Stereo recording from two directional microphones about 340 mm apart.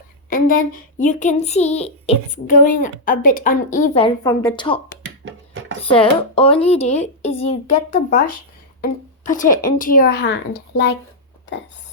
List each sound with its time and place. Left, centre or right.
0.3 s child singing: left
5.0 s a sound: right
5.9 s speech: centre
7.4 s child singing: centre